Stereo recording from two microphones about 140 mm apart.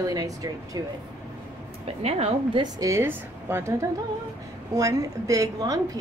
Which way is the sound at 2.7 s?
20° right (ahead or behind).